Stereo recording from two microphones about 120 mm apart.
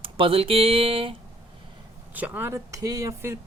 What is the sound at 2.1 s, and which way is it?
Speech, 15° right (ahead or behind).